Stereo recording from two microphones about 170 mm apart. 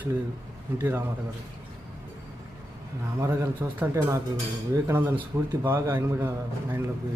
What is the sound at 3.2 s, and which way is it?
Speech, 15° right (ahead or behind).